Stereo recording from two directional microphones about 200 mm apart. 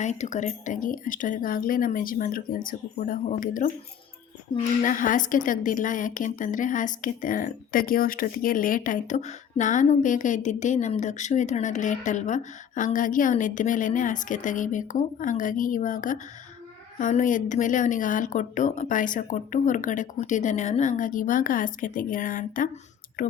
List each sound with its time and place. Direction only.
0.0 s speech: 35° left (ahead or behind)
4.8 s a woman's voice: 40° left (ahead or behind)